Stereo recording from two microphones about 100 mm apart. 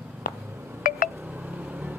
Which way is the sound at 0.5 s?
20° right (ahead or behind).